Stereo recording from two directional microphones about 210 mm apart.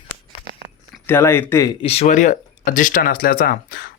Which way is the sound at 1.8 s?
30° left (ahead or behind).